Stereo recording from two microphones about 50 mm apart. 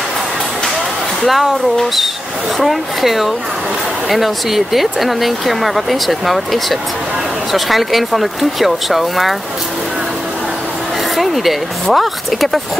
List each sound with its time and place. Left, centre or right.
1.2 s speech: centre
2.6 s speech: centre
11.1 s speech: centre